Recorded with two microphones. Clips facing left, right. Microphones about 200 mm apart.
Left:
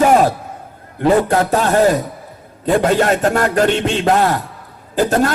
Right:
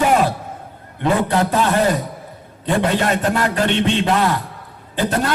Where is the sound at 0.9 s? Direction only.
45° left (ahead or behind).